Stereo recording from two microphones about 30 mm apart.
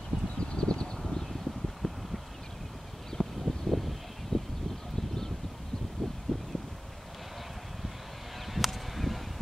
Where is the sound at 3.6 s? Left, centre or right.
Centre.